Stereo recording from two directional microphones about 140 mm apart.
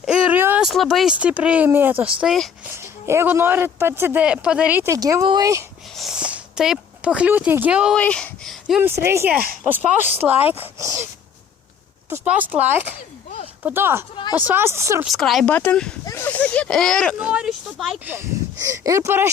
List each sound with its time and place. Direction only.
0.0 s a sound: 5° right (ahead or behind)
0.6 s speech: centre (ahead or behind)
2.7 s speech: 20° right (ahead or behind)
4.9 s speech: 25° right (ahead or behind)
6.0 s speech: 5° right (ahead or behind)
7.9 s speech: 10° left (ahead or behind)
8.8 s speech: 15° right (ahead or behind)
12.1 s speech: 10° right (ahead or behind)
15.0 s speech: centre (ahead or behind)
17.2 s speech: 5° right (ahead or behind)
18.6 s speech: 25° right (ahead or behind)